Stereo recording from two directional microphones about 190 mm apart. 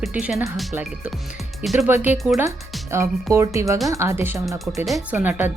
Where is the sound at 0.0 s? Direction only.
5° right (ahead or behind).